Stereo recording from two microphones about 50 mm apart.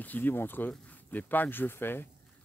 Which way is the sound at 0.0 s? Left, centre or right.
Left.